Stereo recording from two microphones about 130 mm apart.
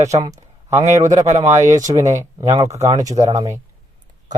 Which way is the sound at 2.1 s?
25° right (ahead or behind).